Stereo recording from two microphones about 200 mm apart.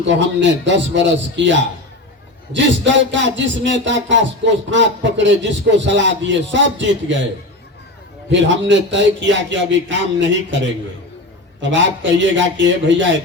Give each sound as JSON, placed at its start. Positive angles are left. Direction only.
{"t": 0.1, "sound": "a man's voice", "side_deg": -65}
{"t": 8.3, "sound": "a man's voice", "side_deg": -65}
{"t": 11.6, "sound": "a man's voice", "side_deg": -65}